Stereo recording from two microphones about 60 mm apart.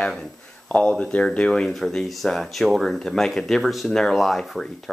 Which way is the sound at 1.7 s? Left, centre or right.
Centre.